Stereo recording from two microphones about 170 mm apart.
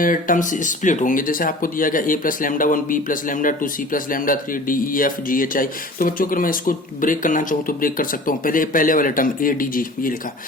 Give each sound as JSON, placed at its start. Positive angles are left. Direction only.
{"t": 0.0, "sound": "speech", "side_deg": 50}